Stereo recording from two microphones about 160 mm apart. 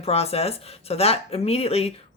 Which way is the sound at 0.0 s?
40° left (ahead or behind).